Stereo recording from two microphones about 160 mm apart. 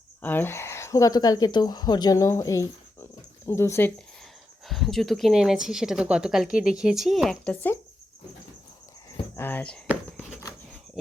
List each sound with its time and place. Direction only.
0.2 s speech: 10° left (ahead or behind)
4.6 s speech: centre (ahead or behind)
9.3 s speech: 10° left (ahead or behind)